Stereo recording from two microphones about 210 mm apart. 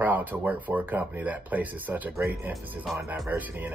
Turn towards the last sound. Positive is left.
turn(degrees=-5)  # may be behind; listen again after turning